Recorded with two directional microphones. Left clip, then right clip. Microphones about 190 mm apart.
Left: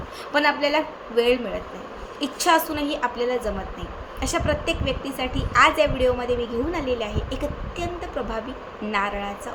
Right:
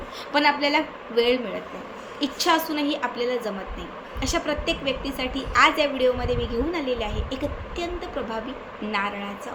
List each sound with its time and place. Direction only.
0.3 s a woman's voice: 10° left (ahead or behind)
8.9 s a woman's voice: 15° left (ahead or behind)